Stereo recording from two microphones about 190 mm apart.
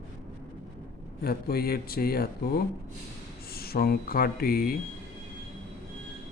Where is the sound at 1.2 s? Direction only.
55° left (ahead or behind).